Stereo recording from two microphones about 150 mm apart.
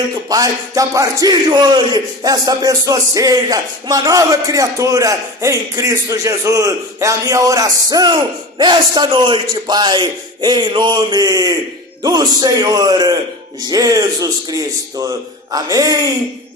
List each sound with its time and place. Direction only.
0.3 s a man's voice: 25° right (ahead or behind)